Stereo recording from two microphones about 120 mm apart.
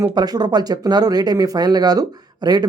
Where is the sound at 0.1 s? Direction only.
35° right (ahead or behind).